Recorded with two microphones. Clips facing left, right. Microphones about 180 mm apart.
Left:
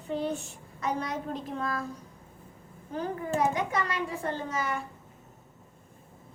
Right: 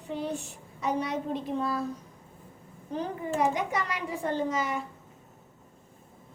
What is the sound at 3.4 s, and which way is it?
A child's voice, 15° right (ahead or behind).